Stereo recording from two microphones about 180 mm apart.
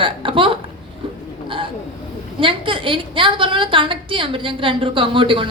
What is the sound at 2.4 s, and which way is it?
A woman's voice, 30° right (ahead or behind).